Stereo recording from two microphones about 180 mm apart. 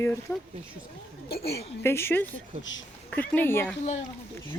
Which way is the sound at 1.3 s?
60° left (ahead or behind).